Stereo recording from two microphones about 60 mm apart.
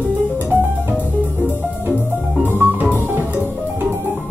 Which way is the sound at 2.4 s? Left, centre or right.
Right.